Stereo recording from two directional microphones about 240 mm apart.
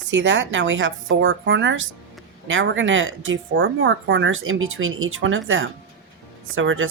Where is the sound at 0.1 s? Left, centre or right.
Right.